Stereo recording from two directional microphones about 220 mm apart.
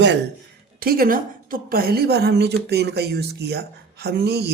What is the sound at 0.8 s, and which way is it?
Speech, 40° right (ahead or behind).